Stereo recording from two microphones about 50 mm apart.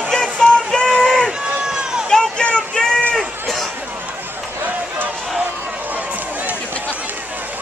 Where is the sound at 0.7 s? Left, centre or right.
Centre.